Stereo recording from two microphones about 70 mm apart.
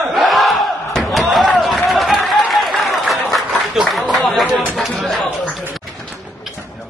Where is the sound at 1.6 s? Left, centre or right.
Centre.